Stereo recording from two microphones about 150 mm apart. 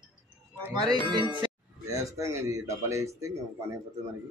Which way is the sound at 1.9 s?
20° right (ahead or behind).